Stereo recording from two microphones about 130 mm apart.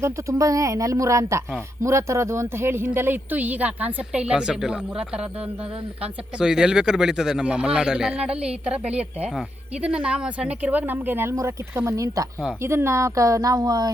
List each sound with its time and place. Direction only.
0.0 s speech: 25° right (ahead or behind)